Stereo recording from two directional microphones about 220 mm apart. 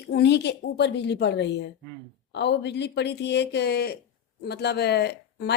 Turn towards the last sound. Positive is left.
turn(degrees=50)  # may be behind; listen again after turning